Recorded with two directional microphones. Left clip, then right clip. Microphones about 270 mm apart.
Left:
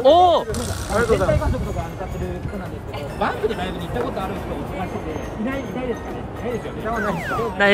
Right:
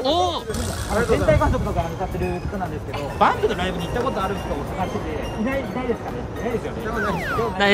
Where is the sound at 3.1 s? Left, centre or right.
Centre.